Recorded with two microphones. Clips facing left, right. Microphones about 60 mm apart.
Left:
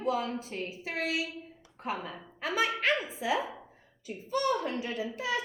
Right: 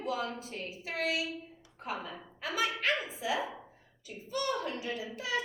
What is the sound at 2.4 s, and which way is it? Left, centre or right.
Speech, left.